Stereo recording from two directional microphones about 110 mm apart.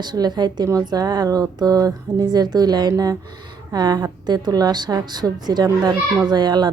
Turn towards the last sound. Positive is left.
turn(degrees=-40)  # may be behind; listen again after turning